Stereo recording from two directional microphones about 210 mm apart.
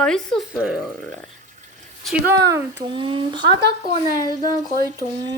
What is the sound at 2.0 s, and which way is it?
Speech, 5° right (ahead or behind).